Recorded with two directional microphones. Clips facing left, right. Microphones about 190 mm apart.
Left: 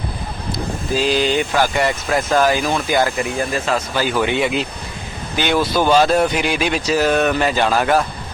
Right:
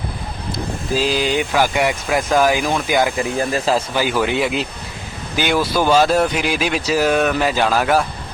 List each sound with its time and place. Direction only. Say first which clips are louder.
0.5 s speech: even; 5° right (ahead or behind)
3.2 s speech: right 1 dB; 35° right (ahead or behind)
3.9 s speech: even; 5° right (ahead or behind)